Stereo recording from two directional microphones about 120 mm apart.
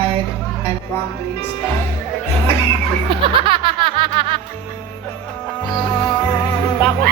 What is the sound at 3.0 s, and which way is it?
Music, 45° right (ahead or behind).